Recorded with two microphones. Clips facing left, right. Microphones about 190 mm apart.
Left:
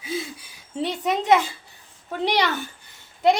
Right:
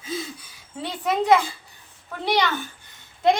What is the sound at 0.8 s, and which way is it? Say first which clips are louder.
Speech: even; 20° left (ahead or behind).